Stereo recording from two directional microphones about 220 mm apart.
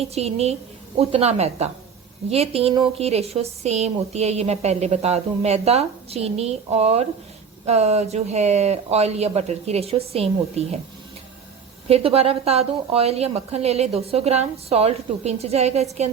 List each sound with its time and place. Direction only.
0.0 s a woman's voice: 30° right (ahead or behind)
11.9 s a woman's voice: 30° right (ahead or behind)